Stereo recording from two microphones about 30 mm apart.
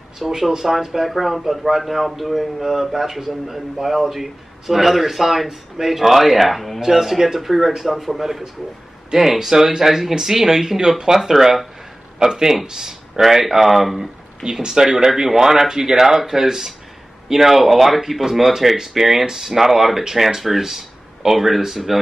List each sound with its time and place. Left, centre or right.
0.3 s speech: centre
13.9 s speech: right